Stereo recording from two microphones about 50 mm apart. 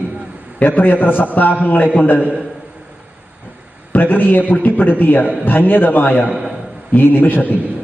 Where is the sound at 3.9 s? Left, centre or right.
Left.